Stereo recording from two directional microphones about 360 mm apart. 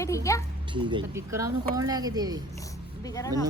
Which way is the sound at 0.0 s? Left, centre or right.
Centre.